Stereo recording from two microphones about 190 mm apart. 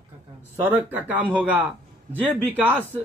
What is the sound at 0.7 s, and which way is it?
Speech, 10° right (ahead or behind).